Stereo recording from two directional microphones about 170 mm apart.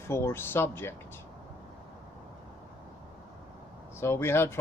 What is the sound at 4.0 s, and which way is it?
Speech, 15° left (ahead or behind).